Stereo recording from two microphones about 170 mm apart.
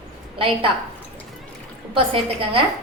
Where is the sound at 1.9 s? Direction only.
35° right (ahead or behind).